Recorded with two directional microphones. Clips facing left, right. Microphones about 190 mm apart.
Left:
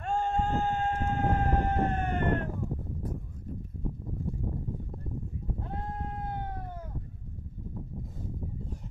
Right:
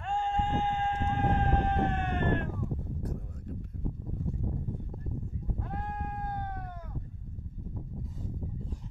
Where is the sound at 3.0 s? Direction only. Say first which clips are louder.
Even; 70° right (ahead or behind).